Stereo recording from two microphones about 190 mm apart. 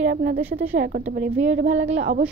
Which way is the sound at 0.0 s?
55° right (ahead or behind).